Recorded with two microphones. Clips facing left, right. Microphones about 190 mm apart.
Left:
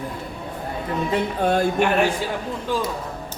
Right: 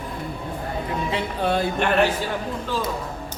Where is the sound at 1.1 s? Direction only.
50° left (ahead or behind).